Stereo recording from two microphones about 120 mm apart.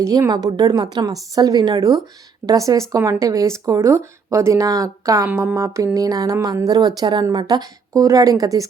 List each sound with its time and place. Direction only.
0.0 s speech: 25° right (ahead or behind)
0.3 s speech: 35° right (ahead or behind)